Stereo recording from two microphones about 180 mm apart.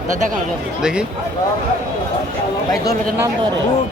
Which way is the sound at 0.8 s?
5° right (ahead or behind).